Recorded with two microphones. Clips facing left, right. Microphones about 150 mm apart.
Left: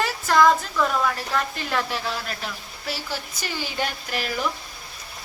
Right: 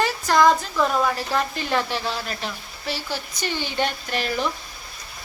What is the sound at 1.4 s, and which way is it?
A woman's voice, centre (ahead or behind).